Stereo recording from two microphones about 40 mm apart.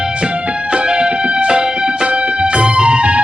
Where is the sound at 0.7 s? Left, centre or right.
Right.